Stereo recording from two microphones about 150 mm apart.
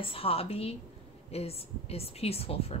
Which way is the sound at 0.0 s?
40° left (ahead or behind).